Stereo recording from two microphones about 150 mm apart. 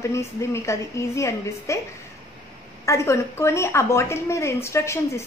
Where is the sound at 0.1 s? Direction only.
20° left (ahead or behind).